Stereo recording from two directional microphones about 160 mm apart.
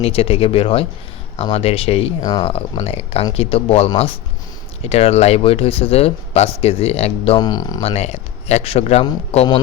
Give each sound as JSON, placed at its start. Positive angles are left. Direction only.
{"t": 0.0, "sound": "speech", "side_deg": 35}
{"t": 7.3, "sound": "speech", "side_deg": 25}
{"t": 7.8, "sound": "speech", "side_deg": 40}